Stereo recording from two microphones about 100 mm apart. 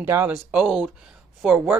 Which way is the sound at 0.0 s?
25° right (ahead or behind).